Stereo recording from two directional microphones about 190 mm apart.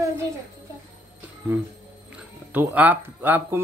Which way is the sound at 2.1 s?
5° right (ahead or behind).